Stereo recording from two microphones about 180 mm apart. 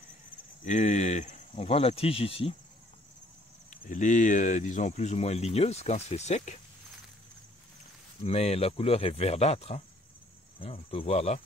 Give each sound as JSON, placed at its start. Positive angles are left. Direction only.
{"t": 0.7, "sound": "speech", "side_deg": 40}
{"t": 3.8, "sound": "speech", "side_deg": 45}
{"t": 8.2, "sound": "speech", "side_deg": 35}